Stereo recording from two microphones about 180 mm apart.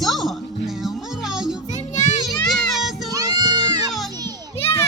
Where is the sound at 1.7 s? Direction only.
40° left (ahead or behind).